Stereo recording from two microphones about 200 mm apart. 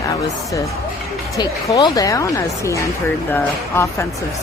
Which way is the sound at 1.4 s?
20° left (ahead or behind).